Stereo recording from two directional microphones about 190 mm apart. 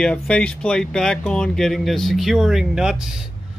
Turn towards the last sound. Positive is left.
turn(degrees=-5)  # may be behind; listen again after turning